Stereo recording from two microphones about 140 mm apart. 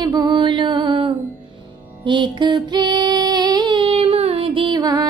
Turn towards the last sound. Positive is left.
turn(degrees=-30)  # may be behind; listen again after turning